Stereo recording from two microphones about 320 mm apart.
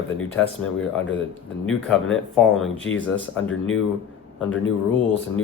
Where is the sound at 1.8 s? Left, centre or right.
Centre.